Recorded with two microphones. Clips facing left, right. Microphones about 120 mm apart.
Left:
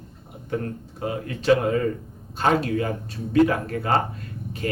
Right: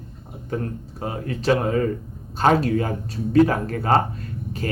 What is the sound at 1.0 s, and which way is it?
Speech, 35° right (ahead or behind).